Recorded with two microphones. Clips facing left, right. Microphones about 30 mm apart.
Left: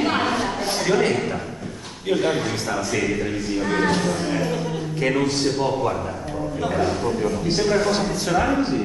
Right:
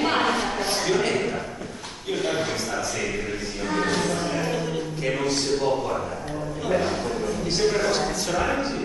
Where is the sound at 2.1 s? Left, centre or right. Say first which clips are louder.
Left 5 dB; centre.